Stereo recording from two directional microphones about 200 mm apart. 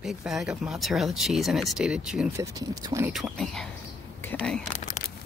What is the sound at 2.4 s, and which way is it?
Speech, 20° right (ahead or behind).